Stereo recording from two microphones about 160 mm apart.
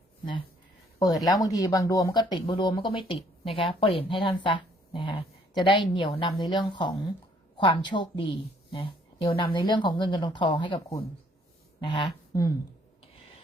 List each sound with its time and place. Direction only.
0.9 s a woman's voice: 25° left (ahead or behind)